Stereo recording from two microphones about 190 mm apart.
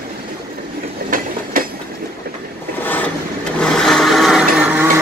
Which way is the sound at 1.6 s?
45° right (ahead or behind).